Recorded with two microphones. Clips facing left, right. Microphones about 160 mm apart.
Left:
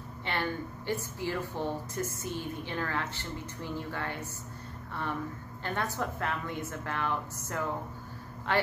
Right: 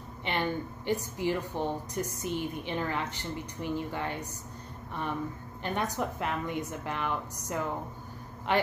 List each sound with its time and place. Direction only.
0.2 s a woman's voice: 20° right (ahead or behind)
5.6 s a woman's voice: 15° right (ahead or behind)